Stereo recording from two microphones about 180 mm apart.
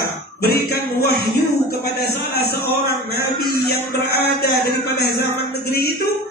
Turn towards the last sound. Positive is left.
turn(degrees=60)  # may be behind; listen again after turning